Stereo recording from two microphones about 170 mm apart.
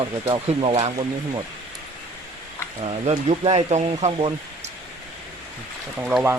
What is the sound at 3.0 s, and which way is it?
Speech, 35° right (ahead or behind).